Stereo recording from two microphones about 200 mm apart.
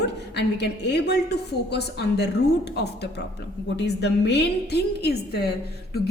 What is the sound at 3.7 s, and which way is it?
A woman's voice, 60° left (ahead or behind).